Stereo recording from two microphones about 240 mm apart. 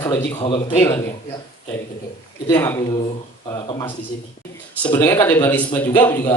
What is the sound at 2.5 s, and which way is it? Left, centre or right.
Speech, centre.